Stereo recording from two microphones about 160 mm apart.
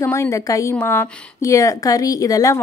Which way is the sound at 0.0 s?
15° left (ahead or behind).